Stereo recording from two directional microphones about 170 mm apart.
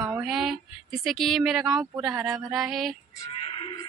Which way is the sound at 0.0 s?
Centre (ahead or behind).